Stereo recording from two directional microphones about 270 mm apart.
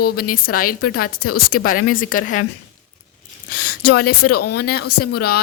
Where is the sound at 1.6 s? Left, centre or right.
Left.